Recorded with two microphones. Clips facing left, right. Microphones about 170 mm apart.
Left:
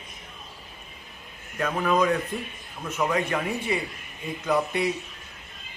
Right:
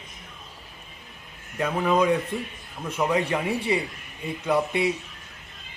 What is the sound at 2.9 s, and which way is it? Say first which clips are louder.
Speech: right 2 dB; 10° right (ahead or behind).